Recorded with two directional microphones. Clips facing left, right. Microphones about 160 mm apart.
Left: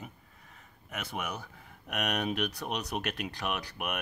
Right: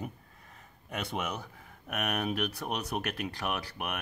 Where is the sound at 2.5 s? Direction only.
5° right (ahead or behind).